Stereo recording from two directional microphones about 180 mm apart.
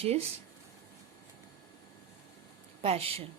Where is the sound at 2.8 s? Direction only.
35° right (ahead or behind).